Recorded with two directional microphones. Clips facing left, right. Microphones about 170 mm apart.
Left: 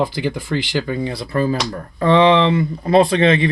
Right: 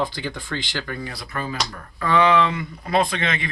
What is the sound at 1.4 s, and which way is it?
Speech, 40° left (ahead or behind).